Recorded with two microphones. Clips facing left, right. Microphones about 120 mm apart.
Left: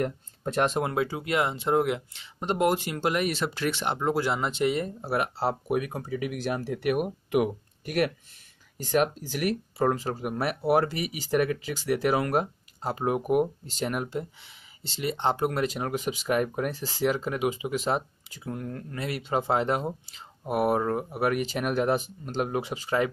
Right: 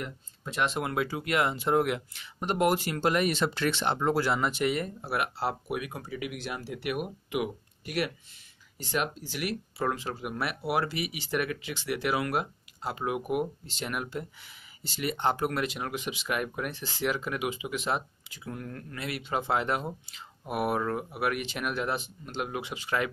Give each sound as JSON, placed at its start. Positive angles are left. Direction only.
{"t": 0.0, "sound": "speech", "side_deg": 45}
{"t": 0.8, "sound": "speech", "side_deg": 25}